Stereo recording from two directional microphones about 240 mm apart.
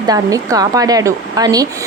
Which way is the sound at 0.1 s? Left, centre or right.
Centre.